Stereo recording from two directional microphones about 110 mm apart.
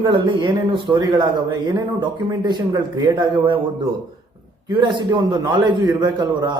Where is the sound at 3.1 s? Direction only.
50° right (ahead or behind).